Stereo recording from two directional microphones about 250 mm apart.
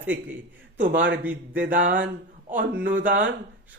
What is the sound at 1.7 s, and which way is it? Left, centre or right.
Speech, right.